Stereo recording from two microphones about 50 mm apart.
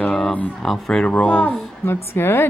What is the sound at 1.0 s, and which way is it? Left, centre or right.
Speech, left.